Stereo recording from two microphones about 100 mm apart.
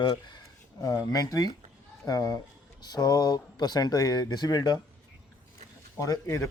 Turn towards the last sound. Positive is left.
turn(degrees=30)  # may be behind; listen again after turning